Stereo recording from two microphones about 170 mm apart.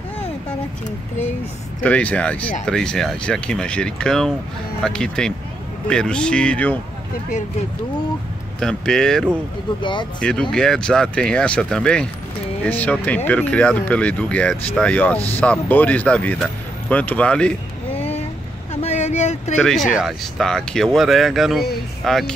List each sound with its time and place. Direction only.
1.8 s speech: 10° left (ahead or behind)
8.5 s speech: 5° left (ahead or behind)
9.8 s speech: 30° left (ahead or behind)
10.2 s speech: 5° left (ahead or behind)
18.7 s vehicle: 40° left (ahead or behind)
19.6 s speech: 5° left (ahead or behind)